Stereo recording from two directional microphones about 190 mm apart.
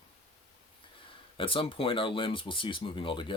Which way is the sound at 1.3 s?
25° left (ahead or behind).